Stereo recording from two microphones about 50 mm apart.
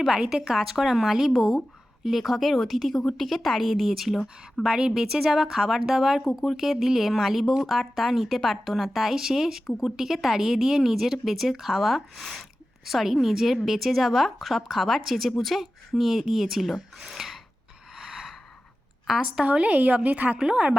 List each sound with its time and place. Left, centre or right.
0.1 s a woman's voice: centre
18.0 s gasp: centre
19.1 s a woman's voice: centre
19.5 s a woman's voice: right